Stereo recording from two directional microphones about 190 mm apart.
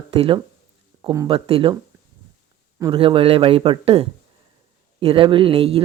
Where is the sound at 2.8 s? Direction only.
25° right (ahead or behind).